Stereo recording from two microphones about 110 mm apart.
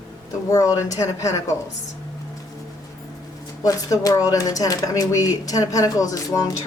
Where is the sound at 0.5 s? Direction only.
30° left (ahead or behind).